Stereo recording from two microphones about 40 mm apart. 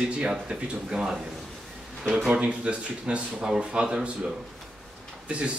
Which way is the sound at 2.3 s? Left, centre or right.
Right.